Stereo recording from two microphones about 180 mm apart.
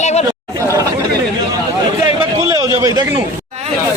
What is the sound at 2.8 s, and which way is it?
Speech, 20° right (ahead or behind).